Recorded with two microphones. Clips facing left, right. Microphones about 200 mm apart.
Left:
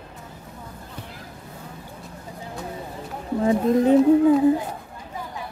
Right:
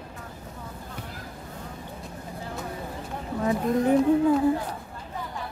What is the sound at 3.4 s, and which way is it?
A woman's voice, 20° left (ahead or behind).